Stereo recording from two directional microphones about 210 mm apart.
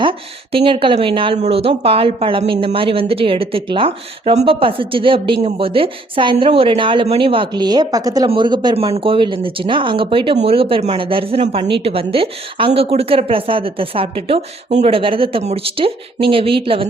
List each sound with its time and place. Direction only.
0.5 s a woman's voice: 25° right (ahead or behind)